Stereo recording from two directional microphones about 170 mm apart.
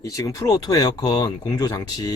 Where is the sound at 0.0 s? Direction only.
20° left (ahead or behind).